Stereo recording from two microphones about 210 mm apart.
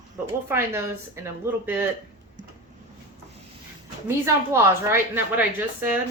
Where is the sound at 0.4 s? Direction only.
10° right (ahead or behind).